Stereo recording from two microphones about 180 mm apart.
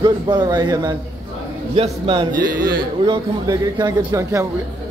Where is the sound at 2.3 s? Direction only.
50° right (ahead or behind).